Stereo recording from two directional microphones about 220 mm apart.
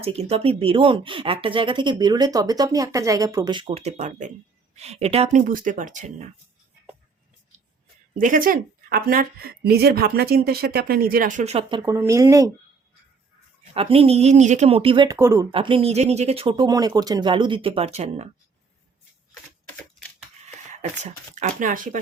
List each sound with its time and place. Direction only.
0.0 s speech: 25° right (ahead or behind)
8.2 s a woman's voice: 40° right (ahead or behind)
11.8 s speech: 15° right (ahead or behind)
13.7 s speech: 25° right (ahead or behind)
15.5 s speech: 25° right (ahead or behind)
21.0 s speech: 35° right (ahead or behind)